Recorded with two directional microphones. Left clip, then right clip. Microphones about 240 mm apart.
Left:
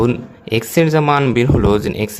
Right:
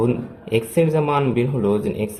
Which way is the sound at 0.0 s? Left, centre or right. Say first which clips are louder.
Left 4 dB; left.